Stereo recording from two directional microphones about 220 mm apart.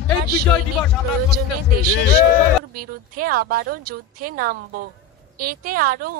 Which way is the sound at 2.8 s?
40° right (ahead or behind).